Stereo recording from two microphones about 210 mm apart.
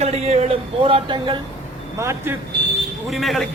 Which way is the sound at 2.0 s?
15° right (ahead or behind).